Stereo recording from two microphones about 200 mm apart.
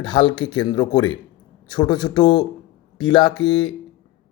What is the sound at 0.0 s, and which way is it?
Speech, 25° left (ahead or behind).